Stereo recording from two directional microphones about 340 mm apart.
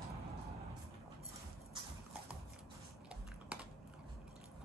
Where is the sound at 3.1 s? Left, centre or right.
Centre.